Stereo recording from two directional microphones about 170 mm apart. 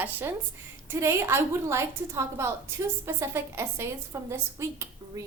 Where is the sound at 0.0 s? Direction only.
15° right (ahead or behind).